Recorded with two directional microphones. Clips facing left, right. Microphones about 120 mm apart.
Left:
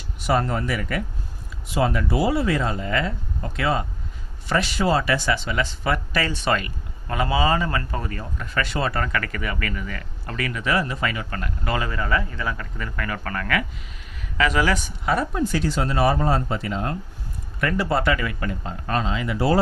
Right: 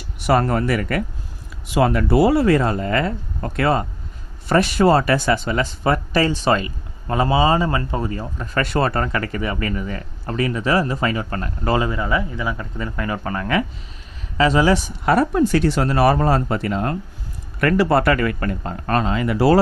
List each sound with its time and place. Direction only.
0.3 s speech: 60° right (ahead or behind); by 8.4 s 25° right (ahead or behind)
8.5 s speech: 50° right (ahead or behind)
9.0 s speech: 30° right (ahead or behind)
11.9 s speech: 15° right (ahead or behind)
15.0 s speech: 65° right (ahead or behind)